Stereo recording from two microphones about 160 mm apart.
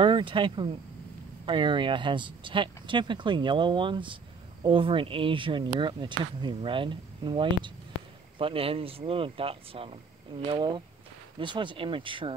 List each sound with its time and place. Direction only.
0.0 s speech: 30° right (ahead or behind)